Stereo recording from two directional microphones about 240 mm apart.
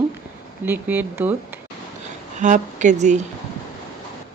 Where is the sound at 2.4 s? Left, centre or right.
Right.